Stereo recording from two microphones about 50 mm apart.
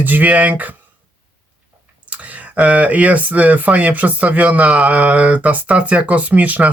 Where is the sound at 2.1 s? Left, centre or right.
Right.